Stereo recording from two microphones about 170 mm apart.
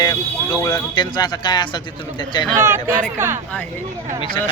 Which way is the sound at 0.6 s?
20° left (ahead or behind).